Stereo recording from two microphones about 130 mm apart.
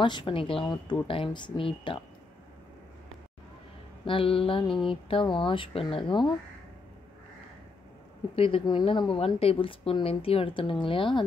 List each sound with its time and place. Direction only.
0.0 s a woman's voice: 40° left (ahead or behind)
4.0 s speech: 40° left (ahead or behind)
8.4 s a woman's voice: 45° left (ahead or behind)
9.1 s a woman's voice: 50° left (ahead or behind)